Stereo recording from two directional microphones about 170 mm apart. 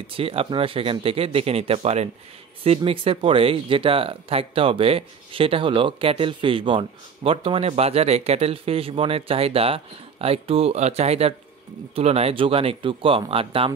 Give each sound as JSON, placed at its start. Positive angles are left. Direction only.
{"t": 0.0, "sound": "speech", "side_deg": -35}